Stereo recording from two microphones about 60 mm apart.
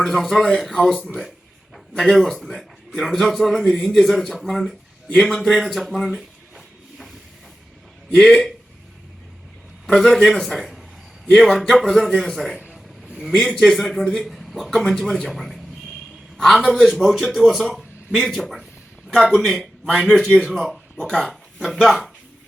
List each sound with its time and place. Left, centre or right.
0.0 s a man's voice: centre
8.1 s a man's voice: centre
9.8 s a man's voice: centre
12.5 s a sound: centre
13.0 s a sound: centre
13.7 s a man's voice: centre